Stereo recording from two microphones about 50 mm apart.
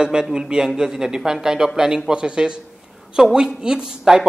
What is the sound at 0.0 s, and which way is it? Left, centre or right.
Speech, centre.